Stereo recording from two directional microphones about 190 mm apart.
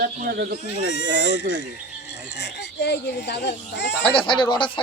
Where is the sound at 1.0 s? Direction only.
60° left (ahead or behind).